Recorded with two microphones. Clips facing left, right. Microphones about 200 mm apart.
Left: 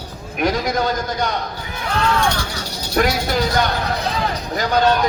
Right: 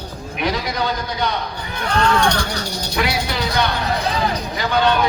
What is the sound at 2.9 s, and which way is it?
A man's voice, 45° left (ahead or behind).